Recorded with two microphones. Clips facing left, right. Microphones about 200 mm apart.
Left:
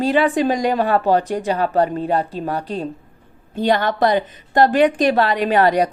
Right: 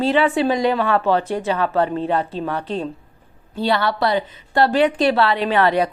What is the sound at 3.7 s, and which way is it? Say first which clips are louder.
A woman's voice: left 3 dB; 45° left (ahead or behind).